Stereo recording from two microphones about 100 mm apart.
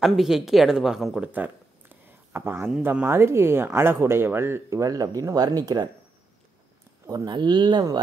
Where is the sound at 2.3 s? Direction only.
20° right (ahead or behind); by 5.8 s 40° right (ahead or behind).